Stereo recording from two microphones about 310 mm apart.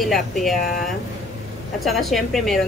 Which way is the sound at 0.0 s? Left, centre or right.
Centre.